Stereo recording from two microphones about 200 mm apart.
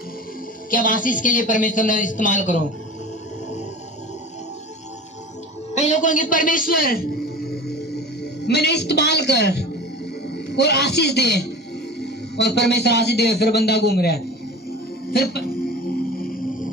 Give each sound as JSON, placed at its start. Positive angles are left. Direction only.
{"t": 0.7, "sound": "speech", "side_deg": 40}
{"t": 5.8, "sound": "a man's voice", "side_deg": 40}
{"t": 7.7, "sound": "music", "side_deg": 55}
{"t": 10.3, "sound": "a man's voice", "side_deg": 55}